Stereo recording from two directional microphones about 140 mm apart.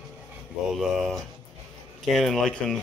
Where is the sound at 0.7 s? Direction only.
Centre (ahead or behind).